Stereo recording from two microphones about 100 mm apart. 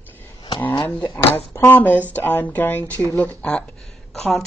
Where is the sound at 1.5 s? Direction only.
25° left (ahead or behind).